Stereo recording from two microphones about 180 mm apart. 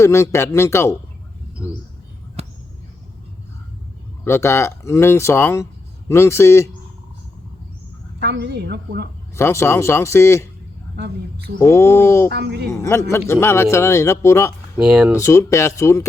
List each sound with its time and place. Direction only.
0.0 s a man's voice: 15° left (ahead or behind)
2.4 s a sound: 35° right (ahead or behind)
4.2 s a man's voice: 15° left (ahead or behind)
8.2 s a woman's voice: 70° right (ahead or behind)
9.3 s a man's voice: 15° left (ahead or behind)
10.9 s a woman's voice: 70° right (ahead or behind)
11.6 s a man's voice: 15° left (ahead or behind)
12.3 s a woman's voice: 70° right (ahead or behind)
12.7 s a man's voice: 15° left (ahead or behind)
14.8 s speech: 5° right (ahead or behind)
15.1 s a man's voice: 15° left (ahead or behind)